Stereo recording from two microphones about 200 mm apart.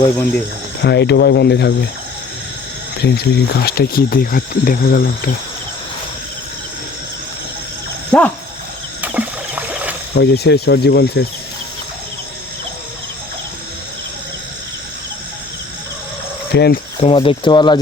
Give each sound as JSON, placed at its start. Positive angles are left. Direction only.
{"t": 0.8, "sound": "speech", "side_deg": 60}
{"t": 3.0, "sound": "speech", "side_deg": 55}
{"t": 8.1, "sound": "speech", "side_deg": 5}
{"t": 9.0, "sound": "rowboat", "side_deg": -10}
{"t": 10.2, "sound": "speech", "side_deg": 55}
{"t": 16.5, "sound": "speech", "side_deg": 55}
{"t": 17.0, "sound": "speech", "side_deg": 30}